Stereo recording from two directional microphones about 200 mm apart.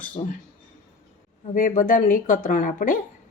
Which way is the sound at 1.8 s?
40° left (ahead or behind).